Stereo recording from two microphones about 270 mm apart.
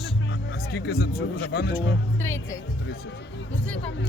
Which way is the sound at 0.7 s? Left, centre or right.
Left.